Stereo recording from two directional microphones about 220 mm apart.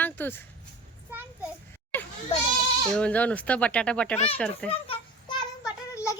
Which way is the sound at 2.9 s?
5° left (ahead or behind).